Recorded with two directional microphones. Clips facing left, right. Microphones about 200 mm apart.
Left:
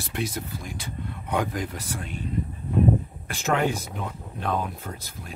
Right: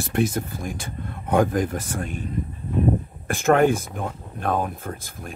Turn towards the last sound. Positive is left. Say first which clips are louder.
# right 4 dB
turn(degrees=-50)  # may be behind; listen again after turning